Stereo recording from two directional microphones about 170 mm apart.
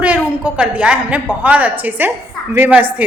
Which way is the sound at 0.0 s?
10° right (ahead or behind).